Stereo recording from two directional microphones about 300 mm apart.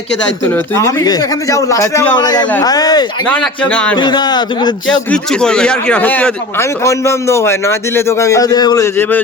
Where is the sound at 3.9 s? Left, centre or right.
Centre.